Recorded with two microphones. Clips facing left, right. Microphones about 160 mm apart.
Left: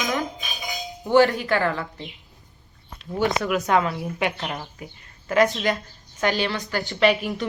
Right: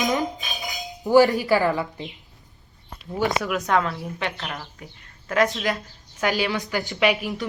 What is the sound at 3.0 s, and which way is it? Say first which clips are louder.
Speech: left 1 dB; centre (ahead or behind).